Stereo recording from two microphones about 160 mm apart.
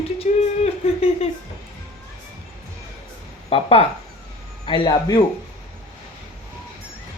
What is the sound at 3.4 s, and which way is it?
Speech, 35° left (ahead or behind).